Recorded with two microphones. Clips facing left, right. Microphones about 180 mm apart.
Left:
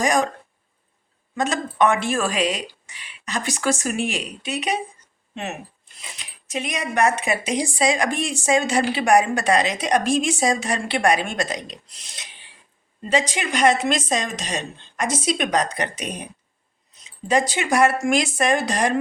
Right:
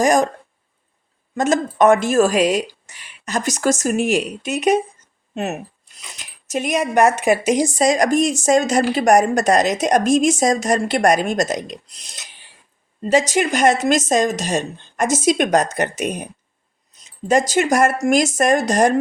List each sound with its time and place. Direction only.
0.0 s speech: 45° right (ahead or behind)
1.4 s speech: 45° right (ahead or behind)